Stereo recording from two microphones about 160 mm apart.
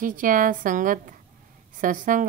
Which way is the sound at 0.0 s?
60° right (ahead or behind).